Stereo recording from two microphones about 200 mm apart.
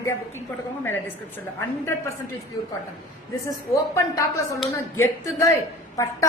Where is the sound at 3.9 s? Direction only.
15° left (ahead or behind).